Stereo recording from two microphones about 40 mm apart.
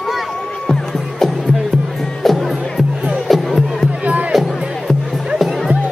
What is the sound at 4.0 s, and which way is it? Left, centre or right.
Music, right.